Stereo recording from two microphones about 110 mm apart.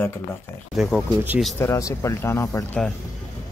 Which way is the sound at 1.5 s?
25° left (ahead or behind).